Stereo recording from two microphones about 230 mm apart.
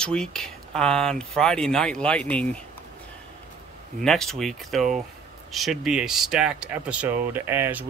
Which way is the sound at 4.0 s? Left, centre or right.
Centre.